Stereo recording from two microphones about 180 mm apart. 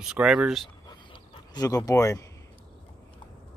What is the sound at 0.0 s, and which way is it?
Speech, 5° right (ahead or behind).